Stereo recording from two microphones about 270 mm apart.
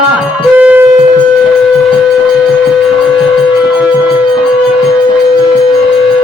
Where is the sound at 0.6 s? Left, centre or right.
Centre.